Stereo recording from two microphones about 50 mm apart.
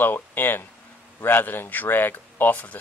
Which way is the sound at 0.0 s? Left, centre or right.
Left.